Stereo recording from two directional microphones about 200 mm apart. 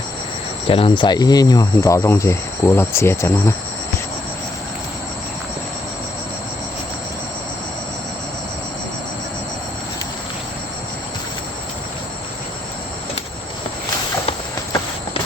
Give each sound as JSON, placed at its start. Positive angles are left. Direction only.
{"t": 0.7, "sound": "speech", "side_deg": 25}